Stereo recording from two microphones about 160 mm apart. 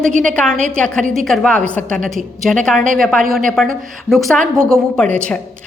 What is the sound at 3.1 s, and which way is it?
Speech, 60° right (ahead or behind).